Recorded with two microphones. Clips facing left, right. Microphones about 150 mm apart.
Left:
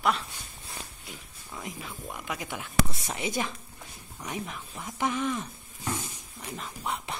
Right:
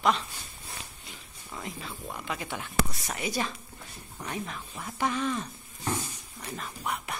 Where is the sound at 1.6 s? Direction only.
15° left (ahead or behind).